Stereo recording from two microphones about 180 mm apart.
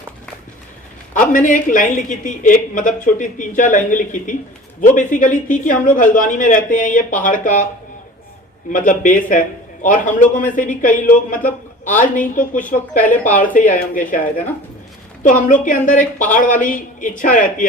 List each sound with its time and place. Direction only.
1.1 s a woman's voice: 45° left (ahead or behind)
8.7 s a woman's voice: 45° left (ahead or behind)
15.2 s a woman's voice: 45° left (ahead or behind)